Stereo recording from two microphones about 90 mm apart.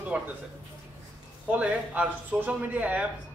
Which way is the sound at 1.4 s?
15° right (ahead or behind).